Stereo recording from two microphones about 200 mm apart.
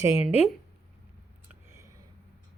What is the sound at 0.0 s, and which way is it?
Speech, 15° right (ahead or behind).